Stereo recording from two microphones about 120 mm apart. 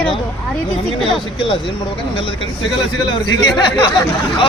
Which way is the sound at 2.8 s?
35° left (ahead or behind).